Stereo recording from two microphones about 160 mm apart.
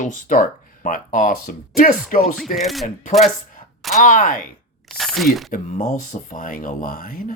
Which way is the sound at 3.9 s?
50° left (ahead or behind).